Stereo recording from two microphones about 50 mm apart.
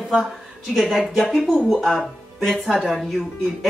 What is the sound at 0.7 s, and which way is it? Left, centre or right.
Speech, centre.